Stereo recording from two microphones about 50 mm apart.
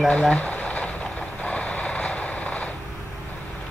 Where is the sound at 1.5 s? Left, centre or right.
Left.